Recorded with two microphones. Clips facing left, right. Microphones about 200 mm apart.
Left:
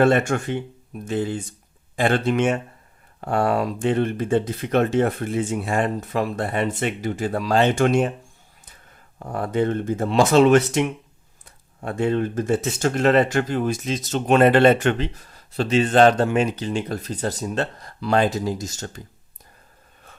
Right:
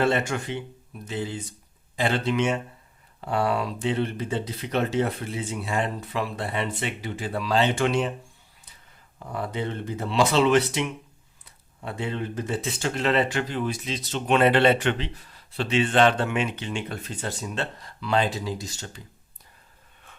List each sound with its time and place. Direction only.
0.0 s speech: 50° left (ahead or behind)
9.1 s speech: 50° left (ahead or behind)